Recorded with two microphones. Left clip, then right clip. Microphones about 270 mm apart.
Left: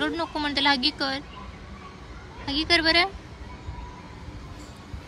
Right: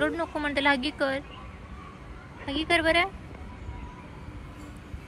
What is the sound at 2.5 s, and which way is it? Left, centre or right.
Speech, centre.